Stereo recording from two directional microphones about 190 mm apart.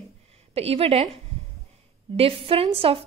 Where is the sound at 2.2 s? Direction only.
30° right (ahead or behind).